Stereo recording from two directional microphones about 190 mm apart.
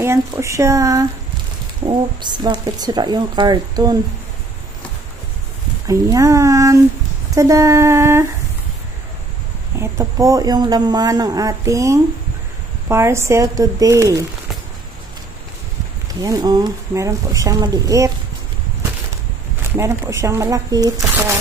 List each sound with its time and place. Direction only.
0.0 s speech: 15° right (ahead or behind)
5.9 s speech: 15° right (ahead or behind)
9.8 s speech: 15° right (ahead or behind)
16.2 s speech: 20° right (ahead or behind)
19.7 s speech: 15° right (ahead or behind)